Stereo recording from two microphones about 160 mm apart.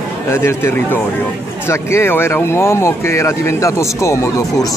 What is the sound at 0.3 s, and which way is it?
Speech, 15° left (ahead or behind).